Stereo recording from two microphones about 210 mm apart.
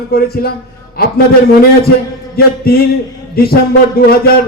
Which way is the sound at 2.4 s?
45° left (ahead or behind).